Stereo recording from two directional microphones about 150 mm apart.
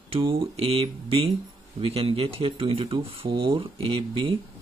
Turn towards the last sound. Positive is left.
turn(degrees=-35)  # may be behind; listen again after turning